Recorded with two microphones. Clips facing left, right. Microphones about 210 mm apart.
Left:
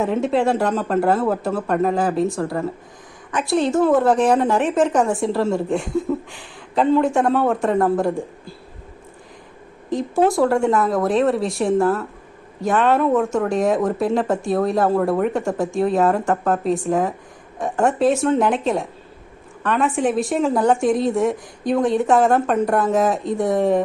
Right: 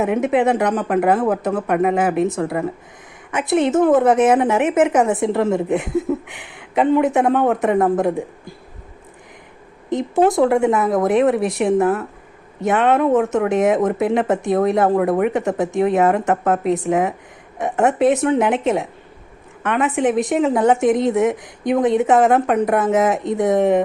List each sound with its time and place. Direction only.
0.0 s a woman's voice: 15° right (ahead or behind)
9.9 s a woman's voice: 20° right (ahead or behind)